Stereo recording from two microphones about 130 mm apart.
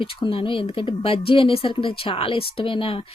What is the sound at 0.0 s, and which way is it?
Speech, 40° left (ahead or behind).